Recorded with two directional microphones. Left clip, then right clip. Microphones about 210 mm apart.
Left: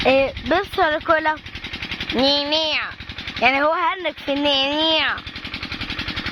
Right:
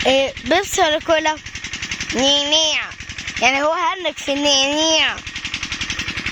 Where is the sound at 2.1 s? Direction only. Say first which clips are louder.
Right 3 dB; 10° right (ahead or behind).